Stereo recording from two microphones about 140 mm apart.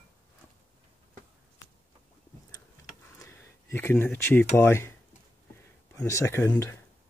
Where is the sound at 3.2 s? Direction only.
15° left (ahead or behind).